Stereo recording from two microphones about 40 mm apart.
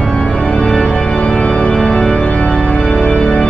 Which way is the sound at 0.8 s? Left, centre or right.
Left.